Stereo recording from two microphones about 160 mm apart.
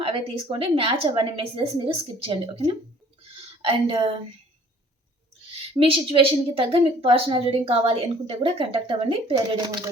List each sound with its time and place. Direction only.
0.0 s a woman's voice: 35° right (ahead or behind)
5.8 s a woman's voice: 35° right (ahead or behind)